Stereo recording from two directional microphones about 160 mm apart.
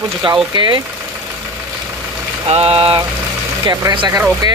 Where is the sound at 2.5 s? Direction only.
40° right (ahead or behind).